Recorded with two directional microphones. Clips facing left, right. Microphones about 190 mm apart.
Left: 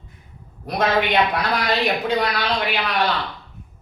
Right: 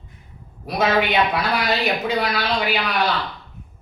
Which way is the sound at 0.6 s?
5° right (ahead or behind).